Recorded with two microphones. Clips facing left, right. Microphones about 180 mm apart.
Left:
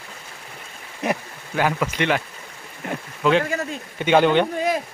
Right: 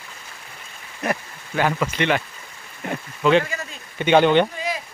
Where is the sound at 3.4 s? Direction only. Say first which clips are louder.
Left 6 dB; 50° left (ahead or behind).